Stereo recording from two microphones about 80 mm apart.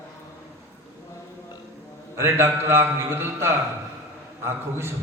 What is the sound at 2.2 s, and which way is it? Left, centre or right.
A man's voice, right.